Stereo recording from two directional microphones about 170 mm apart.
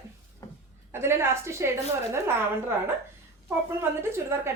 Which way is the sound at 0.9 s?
15° right (ahead or behind).